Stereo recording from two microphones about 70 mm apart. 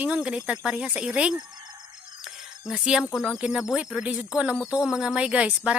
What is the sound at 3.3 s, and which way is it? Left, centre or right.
Speech, centre.